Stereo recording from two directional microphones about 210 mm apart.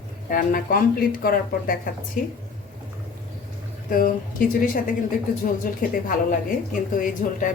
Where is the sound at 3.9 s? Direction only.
40° left (ahead or behind).